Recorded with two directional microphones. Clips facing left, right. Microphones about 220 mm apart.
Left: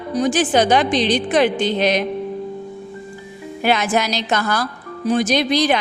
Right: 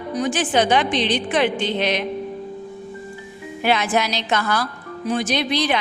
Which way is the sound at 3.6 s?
45° left (ahead or behind).